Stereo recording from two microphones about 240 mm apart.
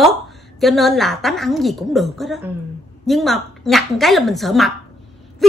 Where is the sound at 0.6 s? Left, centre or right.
Centre.